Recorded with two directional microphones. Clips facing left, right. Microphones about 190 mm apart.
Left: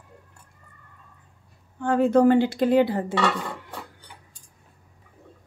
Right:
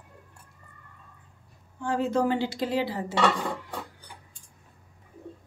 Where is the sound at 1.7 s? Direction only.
55° left (ahead or behind).